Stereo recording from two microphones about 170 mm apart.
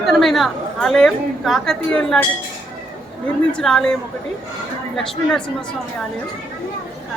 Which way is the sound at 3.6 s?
5° left (ahead or behind).